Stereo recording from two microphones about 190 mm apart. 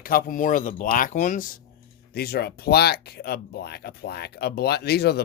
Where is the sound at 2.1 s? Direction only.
55° left (ahead or behind).